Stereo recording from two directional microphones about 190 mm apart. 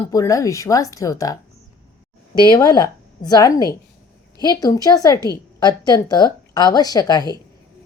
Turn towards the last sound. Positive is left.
turn(degrees=20)  # may be behind; listen again after turning